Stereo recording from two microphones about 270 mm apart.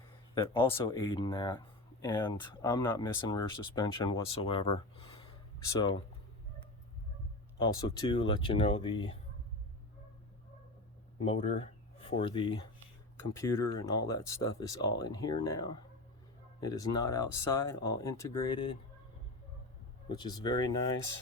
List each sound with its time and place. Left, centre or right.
0.3 s speech: centre
7.6 s speech: centre
11.2 s speech: left
20.1 s speech: centre